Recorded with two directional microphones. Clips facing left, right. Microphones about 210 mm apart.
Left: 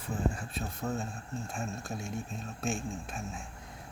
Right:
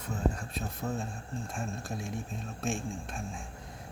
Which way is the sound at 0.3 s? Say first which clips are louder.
Right 1 dB; centre (ahead or behind).